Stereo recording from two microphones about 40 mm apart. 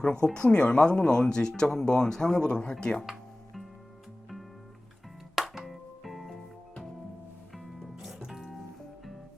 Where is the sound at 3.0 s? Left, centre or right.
Centre.